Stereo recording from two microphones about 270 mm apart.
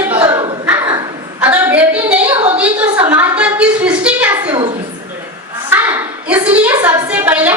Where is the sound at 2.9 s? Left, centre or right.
Centre.